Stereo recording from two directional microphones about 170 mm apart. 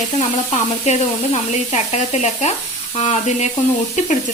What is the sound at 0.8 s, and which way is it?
Sizzle, 40° left (ahead or behind).